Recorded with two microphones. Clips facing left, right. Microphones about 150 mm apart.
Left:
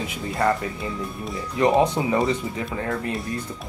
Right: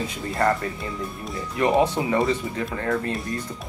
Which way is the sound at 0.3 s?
Centre (ahead or behind).